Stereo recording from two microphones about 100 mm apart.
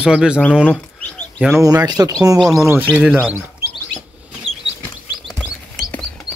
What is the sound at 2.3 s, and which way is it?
Speech, centre (ahead or behind).